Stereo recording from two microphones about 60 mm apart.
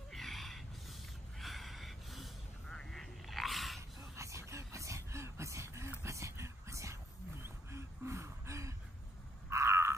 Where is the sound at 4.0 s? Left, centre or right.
Right.